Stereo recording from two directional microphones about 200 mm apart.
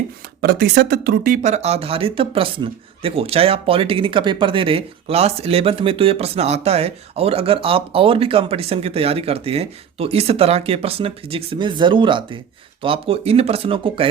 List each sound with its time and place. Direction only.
0.4 s speech: 55° right (ahead or behind); by 14.1 s 25° right (ahead or behind)